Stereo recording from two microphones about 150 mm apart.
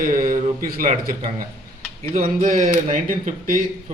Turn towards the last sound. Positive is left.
turn(degrees=-65)  # may be behind; listen again after turning